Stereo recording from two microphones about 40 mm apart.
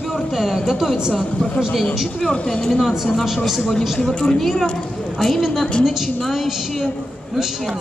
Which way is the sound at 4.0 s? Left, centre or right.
Centre.